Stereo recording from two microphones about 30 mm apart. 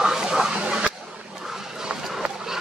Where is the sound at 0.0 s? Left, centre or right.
Centre.